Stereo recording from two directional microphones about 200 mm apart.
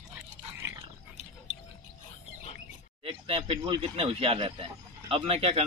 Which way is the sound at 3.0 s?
25° right (ahead or behind).